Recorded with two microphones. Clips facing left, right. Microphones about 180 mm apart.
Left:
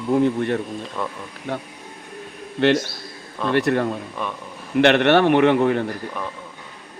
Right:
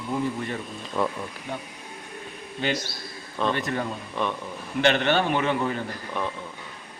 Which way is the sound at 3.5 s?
70° left (ahead or behind).